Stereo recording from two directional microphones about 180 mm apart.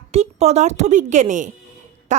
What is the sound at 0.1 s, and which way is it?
A woman's voice, 35° right (ahead or behind).